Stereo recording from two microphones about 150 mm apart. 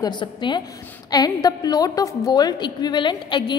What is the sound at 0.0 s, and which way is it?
A woman's voice, 30° left (ahead or behind).